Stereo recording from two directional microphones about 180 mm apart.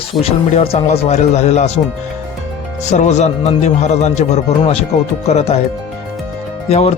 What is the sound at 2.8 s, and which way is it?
Speech, 40° left (ahead or behind).